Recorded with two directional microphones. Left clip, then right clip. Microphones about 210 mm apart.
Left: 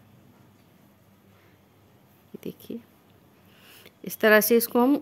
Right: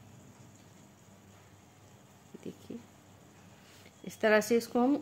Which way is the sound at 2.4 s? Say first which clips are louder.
Left 8 dB; 50° left (ahead or behind).